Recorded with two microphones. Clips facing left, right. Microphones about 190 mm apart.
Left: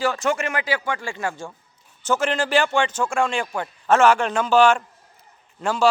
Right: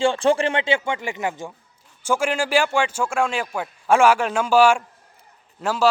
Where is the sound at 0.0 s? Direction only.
30° right (ahead or behind).